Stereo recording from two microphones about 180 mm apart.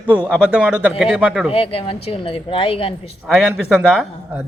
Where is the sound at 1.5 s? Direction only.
30° left (ahead or behind).